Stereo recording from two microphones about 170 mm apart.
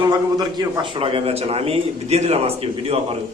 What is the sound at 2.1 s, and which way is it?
Speech, 35° right (ahead or behind).